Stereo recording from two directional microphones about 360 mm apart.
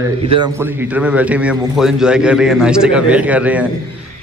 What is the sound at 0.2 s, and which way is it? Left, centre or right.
A man's voice, centre.